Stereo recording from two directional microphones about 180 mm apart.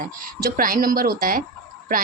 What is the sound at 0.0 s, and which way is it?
Speech, 50° right (ahead or behind).